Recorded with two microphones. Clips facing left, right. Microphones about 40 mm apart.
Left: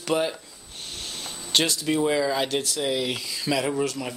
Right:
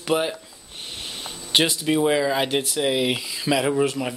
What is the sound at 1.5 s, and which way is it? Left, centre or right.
Speech, centre.